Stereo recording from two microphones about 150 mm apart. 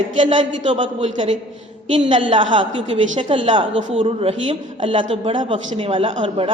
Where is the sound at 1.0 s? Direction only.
35° right (ahead or behind).